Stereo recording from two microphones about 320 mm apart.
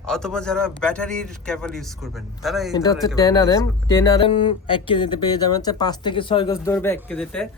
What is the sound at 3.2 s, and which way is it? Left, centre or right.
A man's voice, centre.